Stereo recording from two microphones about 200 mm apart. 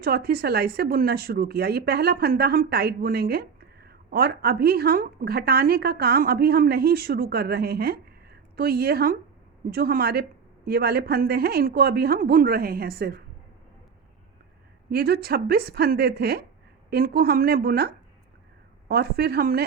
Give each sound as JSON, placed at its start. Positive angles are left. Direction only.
{"t": 0.0, "sound": "a woman's voice", "side_deg": -50}
{"t": 14.8, "sound": "a woman's voice", "side_deg": -50}